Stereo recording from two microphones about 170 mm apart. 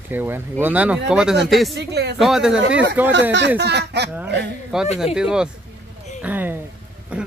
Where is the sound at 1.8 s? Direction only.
80° right.